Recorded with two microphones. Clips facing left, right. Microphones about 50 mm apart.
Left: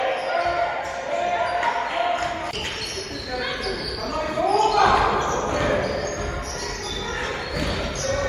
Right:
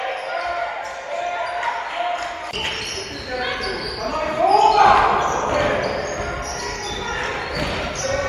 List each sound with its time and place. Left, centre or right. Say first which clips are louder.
0.0 s basketball bounce: left 2 dB; centre
4.1 s basketball bounce: right 4 dB; right
4.5 s basketball bounce: right 6 dB; right
4.7 s basketball bounce: right 4 dB; right